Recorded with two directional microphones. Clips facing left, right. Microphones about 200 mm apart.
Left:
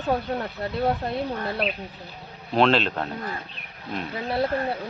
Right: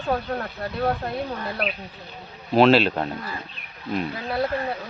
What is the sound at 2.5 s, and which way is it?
Speech, 5° right (ahead or behind).